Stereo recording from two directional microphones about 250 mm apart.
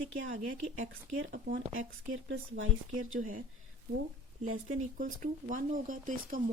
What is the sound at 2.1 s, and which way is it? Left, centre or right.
Speech, right.